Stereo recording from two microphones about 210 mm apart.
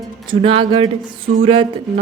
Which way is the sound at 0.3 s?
25° right (ahead or behind).